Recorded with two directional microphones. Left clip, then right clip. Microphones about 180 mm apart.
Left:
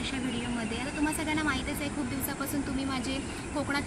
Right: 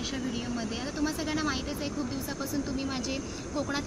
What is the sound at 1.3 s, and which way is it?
Speech, 15° right (ahead or behind).